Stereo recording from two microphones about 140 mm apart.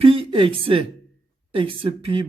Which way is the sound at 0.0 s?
40° right (ahead or behind).